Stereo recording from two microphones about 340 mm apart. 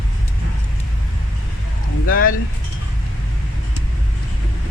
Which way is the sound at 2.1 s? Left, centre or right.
Left.